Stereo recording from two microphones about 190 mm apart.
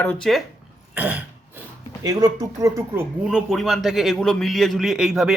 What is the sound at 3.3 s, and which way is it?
A man's voice, centre (ahead or behind).